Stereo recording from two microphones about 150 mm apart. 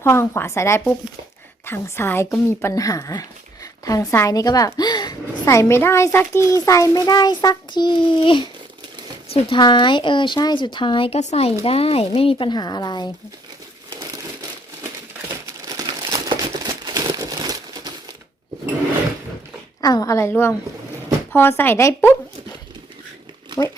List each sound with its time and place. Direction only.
0.0 s a woman's voice: 15° left (ahead or behind); by 11.2 s 35° left (ahead or behind)
11.2 s speech: 45° left (ahead or behind); by 13.1 s 30° left (ahead or behind)
15.6 s crumpling: 25° right (ahead or behind)
19.8 s a woman's voice: 25° left (ahead or behind)